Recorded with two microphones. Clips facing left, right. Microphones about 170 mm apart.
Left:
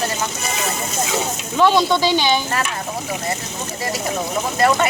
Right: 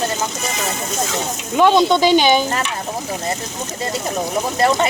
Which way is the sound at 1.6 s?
20° right (ahead or behind).